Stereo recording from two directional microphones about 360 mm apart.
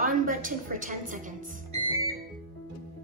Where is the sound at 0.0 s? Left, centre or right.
Right.